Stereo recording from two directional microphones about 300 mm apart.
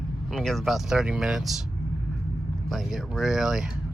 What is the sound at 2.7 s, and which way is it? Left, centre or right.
Speech, centre.